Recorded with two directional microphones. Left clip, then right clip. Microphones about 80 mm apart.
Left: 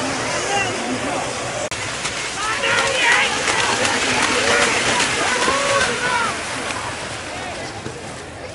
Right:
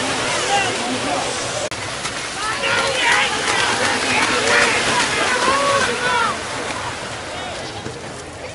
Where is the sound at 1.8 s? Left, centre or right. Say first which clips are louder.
Left 1 dB; centre.